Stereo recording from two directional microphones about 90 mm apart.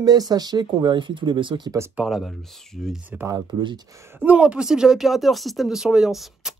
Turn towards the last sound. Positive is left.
turn(degrees=-5)  # may be behind; listen again after turning